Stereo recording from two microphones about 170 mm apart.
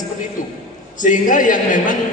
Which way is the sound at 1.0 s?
50° left (ahead or behind).